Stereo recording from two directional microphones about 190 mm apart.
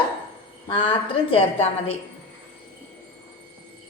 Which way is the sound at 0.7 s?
25° left (ahead or behind).